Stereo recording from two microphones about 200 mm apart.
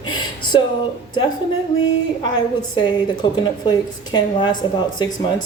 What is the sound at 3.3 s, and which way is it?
Speech, 20° left (ahead or behind).